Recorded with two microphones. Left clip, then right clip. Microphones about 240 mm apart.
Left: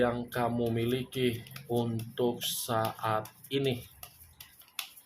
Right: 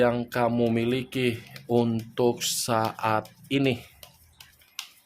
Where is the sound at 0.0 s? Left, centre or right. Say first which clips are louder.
Right 6 dB; right.